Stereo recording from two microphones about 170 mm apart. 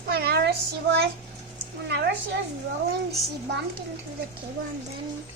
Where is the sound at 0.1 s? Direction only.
70° right (ahead or behind).